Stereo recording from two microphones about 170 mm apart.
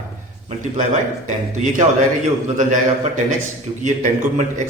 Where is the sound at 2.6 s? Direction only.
45° right (ahead or behind).